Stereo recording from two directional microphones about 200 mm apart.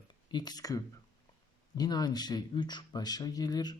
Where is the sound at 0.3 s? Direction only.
20° left (ahead or behind).